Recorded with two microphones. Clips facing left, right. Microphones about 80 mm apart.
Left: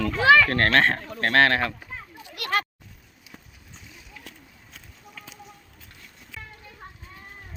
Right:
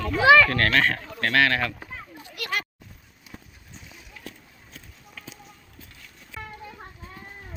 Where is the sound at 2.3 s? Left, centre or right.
Left.